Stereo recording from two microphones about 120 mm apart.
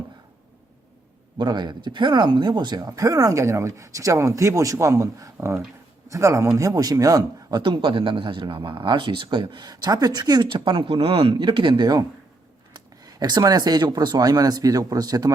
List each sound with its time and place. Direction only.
1.4 s speech: 40° right (ahead or behind)
7.6 s speech: 45° right (ahead or behind)